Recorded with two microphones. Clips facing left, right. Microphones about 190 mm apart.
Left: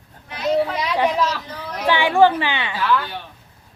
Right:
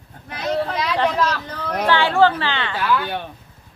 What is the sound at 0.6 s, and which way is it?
A woman's voice, 10° left (ahead or behind).